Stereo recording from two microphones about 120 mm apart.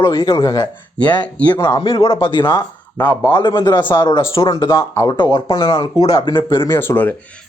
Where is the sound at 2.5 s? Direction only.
15° left (ahead or behind).